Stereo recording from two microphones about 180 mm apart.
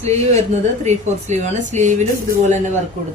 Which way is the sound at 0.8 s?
40° right (ahead or behind).